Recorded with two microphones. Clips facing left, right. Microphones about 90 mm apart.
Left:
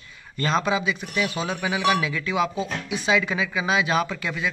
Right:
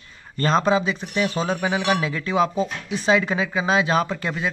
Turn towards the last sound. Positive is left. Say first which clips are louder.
# right 2 dB
turn(degrees=-35)  # may be behind; listen again after turning